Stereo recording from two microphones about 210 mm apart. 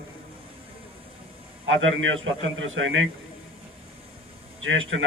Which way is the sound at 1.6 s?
65° right (ahead or behind).